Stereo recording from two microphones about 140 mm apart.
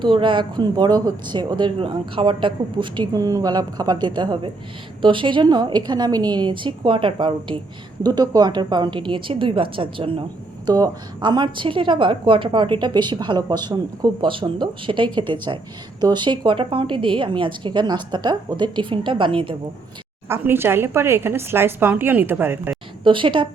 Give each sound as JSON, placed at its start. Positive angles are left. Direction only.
{"t": 0.0, "sound": "a woman's voice", "side_deg": -35}
{"t": 10.7, "sound": "a woman's voice", "side_deg": -30}
{"t": 20.2, "sound": "speech", "side_deg": -15}
{"t": 23.0, "sound": "a woman's voice", "side_deg": -35}